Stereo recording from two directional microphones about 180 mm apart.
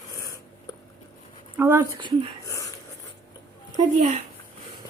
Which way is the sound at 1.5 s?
10° right (ahead or behind).